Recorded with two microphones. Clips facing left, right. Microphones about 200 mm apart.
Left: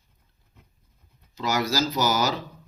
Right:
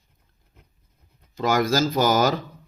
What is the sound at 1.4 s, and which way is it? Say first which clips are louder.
Speech: right 4 dB; 50° right (ahead or behind).